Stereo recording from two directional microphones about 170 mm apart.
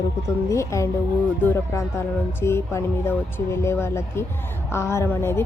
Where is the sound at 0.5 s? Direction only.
15° left (ahead or behind).